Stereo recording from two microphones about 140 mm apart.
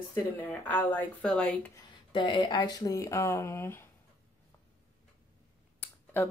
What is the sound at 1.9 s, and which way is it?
Speech, 35° left (ahead or behind).